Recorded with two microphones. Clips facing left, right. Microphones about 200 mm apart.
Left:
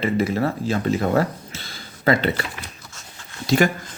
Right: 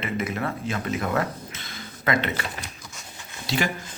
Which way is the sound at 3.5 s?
45° left (ahead or behind).